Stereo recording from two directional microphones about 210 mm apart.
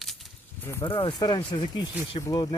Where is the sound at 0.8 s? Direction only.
25° left (ahead or behind).